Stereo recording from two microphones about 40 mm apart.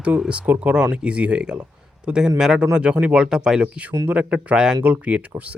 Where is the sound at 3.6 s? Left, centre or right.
Right.